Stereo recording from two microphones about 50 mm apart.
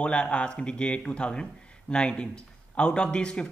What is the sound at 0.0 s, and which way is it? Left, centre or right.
A man's voice, left.